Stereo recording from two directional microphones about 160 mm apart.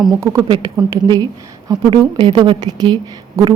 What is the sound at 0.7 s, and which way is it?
A woman's voice, 20° right (ahead or behind).